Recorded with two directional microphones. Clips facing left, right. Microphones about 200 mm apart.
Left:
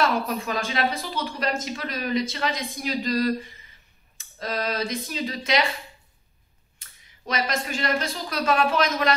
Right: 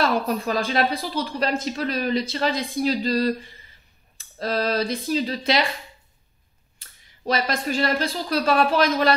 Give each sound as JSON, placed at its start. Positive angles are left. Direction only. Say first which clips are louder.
{"t": 0.0, "sound": "speech", "louder": "right 2 dB", "side_deg": -35}
{"t": 6.8, "sound": "speech", "louder": "right 7 dB", "side_deg": -35}